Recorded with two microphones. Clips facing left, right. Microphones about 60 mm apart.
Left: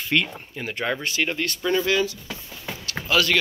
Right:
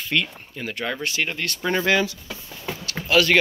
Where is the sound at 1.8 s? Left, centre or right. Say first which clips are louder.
Right 2 dB; right.